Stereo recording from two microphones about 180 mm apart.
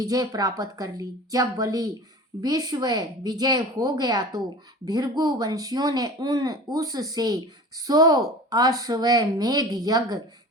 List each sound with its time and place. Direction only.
0.0 s speech: 20° right (ahead or behind)